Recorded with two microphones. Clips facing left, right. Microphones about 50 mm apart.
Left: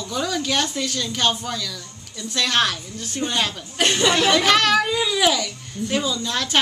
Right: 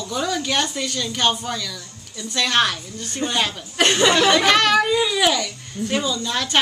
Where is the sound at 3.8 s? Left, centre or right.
Right.